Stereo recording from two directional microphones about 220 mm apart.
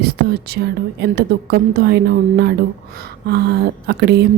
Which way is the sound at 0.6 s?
45° right (ahead or behind).